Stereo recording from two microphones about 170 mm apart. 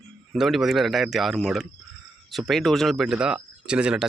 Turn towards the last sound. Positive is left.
turn(degrees=-5)  # may be behind; listen again after turning